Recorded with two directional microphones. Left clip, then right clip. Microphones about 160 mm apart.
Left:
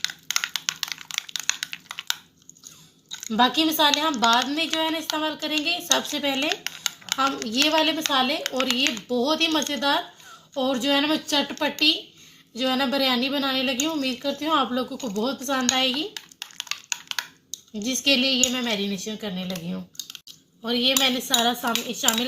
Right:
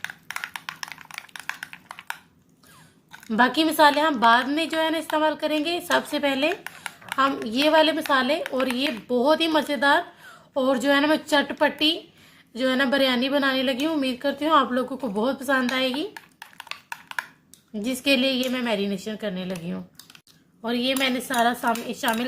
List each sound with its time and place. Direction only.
0.0 s a sound: 20° right (ahead or behind)
3.2 s a woman's voice: 35° right (ahead or behind)
6.7 s a sound: 20° right (ahead or behind)
7.2 s a woman's voice: 40° right (ahead or behind)
8.5 s a woman's voice: 20° right (ahead or behind)
9.0 s a woman's voice: 35° right (ahead or behind)
17.7 s a woman's voice: 40° right (ahead or behind)
20.6 s a woman's voice: 30° right (ahead or behind)